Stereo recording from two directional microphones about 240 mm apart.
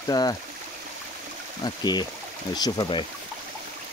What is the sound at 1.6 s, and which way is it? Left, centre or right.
Speech, centre.